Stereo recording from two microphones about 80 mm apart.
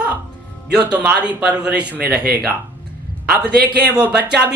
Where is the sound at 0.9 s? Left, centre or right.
Centre.